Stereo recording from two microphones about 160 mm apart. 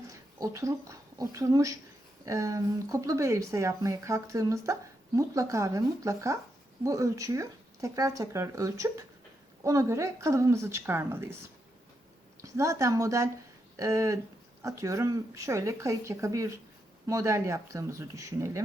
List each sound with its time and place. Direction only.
0.1 s a woman's voice: 20° right (ahead or behind)
12.4 s a woman's voice: 20° right (ahead or behind)